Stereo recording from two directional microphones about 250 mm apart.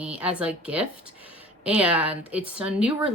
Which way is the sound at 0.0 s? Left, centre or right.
Centre.